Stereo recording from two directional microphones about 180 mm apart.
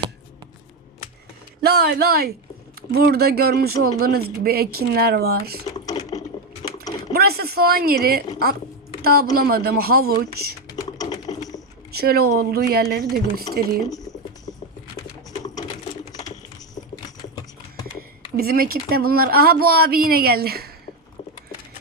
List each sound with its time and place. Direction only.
1.6 s speech: 60° right (ahead or behind)
5.7 s a sound: 20° left (ahead or behind)
7.1 s speech: 60° right (ahead or behind)
9.0 s a sound: 60° right (ahead or behind)
9.3 s speech: 55° right (ahead or behind)
10.8 s typing: 20° left (ahead or behind)
11.9 s speech: 60° right (ahead or behind)
13.8 s speech: 20° left (ahead or behind)
15.3 s typing: 20° left (ahead or behind)
18.3 s speech: 55° right (ahead or behind)